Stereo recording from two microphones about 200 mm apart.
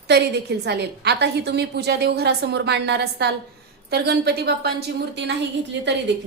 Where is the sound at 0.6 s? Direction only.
55° right (ahead or behind).